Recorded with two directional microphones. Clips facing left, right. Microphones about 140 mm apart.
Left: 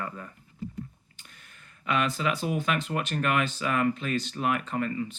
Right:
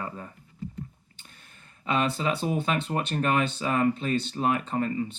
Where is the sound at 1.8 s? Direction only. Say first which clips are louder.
Right 1 dB; 30° right (ahead or behind).